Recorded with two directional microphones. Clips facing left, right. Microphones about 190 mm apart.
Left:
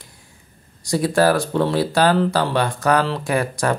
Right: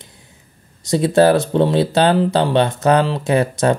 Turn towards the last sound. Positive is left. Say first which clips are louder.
# right 5 dB
turn(degrees=-25)  # may be behind; listen again after turning